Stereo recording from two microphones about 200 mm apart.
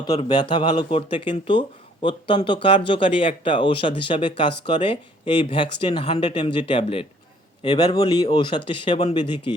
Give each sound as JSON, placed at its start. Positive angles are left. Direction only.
{"t": 0.0, "sound": "speech", "side_deg": 25}